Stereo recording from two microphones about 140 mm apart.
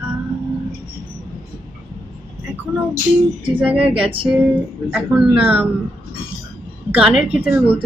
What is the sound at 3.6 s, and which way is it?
Speech, 10° right (ahead or behind).